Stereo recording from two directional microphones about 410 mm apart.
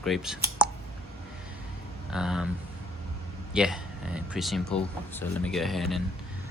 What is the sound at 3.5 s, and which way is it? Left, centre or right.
Speech, centre.